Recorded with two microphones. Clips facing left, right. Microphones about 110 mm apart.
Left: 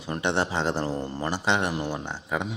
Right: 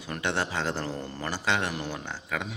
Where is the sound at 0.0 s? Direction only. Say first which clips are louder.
Left 4 dB; 25° left (ahead or behind).